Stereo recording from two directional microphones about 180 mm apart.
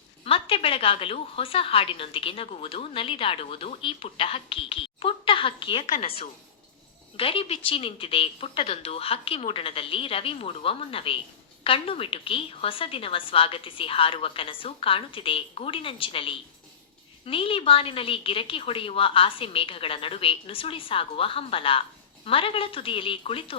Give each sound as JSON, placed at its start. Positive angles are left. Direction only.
{"t": 0.3, "sound": "a woman's voice", "side_deg": 30}
{"t": 5.8, "sound": "a woman's voice", "side_deg": 40}